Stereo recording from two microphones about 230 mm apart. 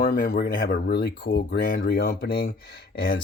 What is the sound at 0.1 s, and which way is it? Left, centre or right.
Speech, left.